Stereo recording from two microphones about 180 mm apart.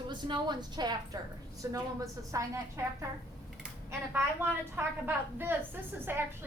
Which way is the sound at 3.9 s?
10° right (ahead or behind).